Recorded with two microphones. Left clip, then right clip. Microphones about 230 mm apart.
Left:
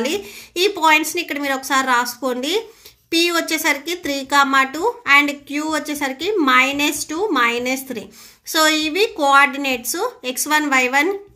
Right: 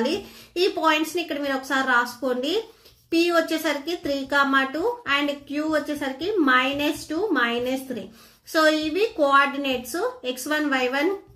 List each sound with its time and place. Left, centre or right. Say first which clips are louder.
0.6 s speech: left 6 dB; left